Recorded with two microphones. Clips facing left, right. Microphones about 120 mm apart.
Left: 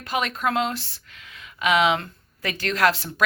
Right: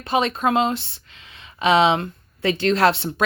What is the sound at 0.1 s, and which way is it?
Speech, 25° right (ahead or behind).